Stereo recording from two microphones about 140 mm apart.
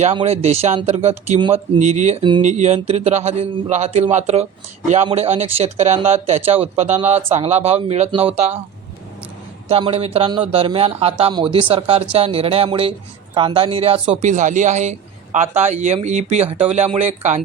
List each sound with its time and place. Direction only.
0.3 s speech: 50° right (ahead or behind)
1.4 s speech: 40° right (ahead or behind)
9.6 s speech: 45° right (ahead or behind)